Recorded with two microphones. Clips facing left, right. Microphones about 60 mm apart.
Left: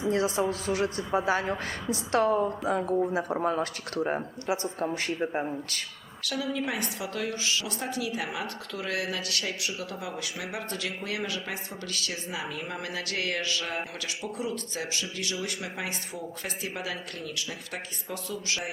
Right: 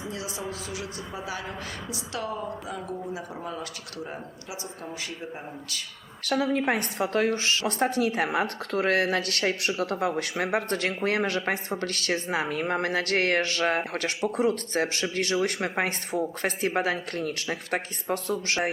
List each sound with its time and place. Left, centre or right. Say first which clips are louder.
0.1 s speech: left 11 dB; left
6.2 s a woman's voice: right 6 dB; right